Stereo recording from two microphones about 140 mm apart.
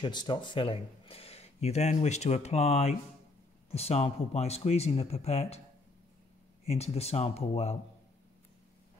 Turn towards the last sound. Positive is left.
turn(degrees=50)  # may be behind; listen again after turning